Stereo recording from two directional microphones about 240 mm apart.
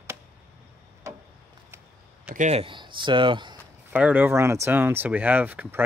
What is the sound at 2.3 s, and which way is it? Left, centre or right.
Speech, right.